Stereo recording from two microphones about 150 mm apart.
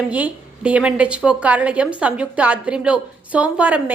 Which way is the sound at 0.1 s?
10° right (ahead or behind).